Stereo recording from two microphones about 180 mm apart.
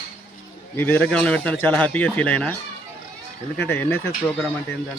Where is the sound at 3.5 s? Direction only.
10° left (ahead or behind).